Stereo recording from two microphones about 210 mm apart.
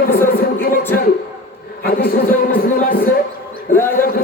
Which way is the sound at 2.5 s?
45° left (ahead or behind).